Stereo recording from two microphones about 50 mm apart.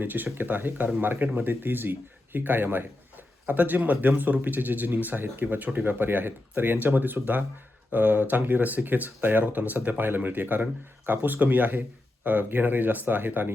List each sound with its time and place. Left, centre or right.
0.0 s speech: right